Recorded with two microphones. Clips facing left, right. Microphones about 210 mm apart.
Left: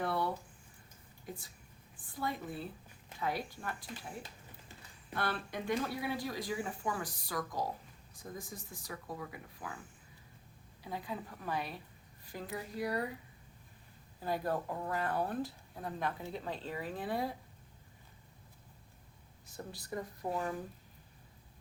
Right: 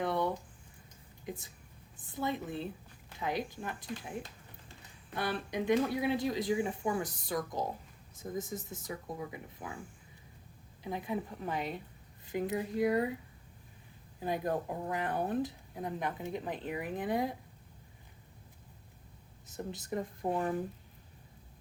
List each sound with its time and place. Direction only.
0.0 s a sound: 20° right (ahead or behind)
2.0 s a woman's voice: 20° right (ahead or behind)
10.8 s speech: 20° right (ahead or behind)
14.2 s speech: 20° right (ahead or behind)
19.5 s speech: 20° right (ahead or behind)